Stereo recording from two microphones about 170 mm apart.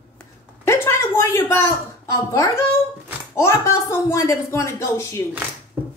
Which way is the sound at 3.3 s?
15° left (ahead or behind).